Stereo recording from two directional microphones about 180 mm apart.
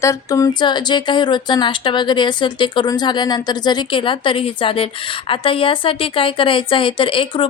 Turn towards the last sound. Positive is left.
turn(degrees=30)  # may be behind; listen again after turning